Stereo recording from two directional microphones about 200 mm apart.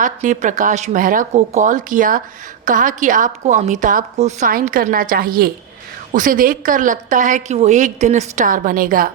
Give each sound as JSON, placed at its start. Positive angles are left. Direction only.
{"t": 0.0, "sound": "a woman's voice", "side_deg": -40}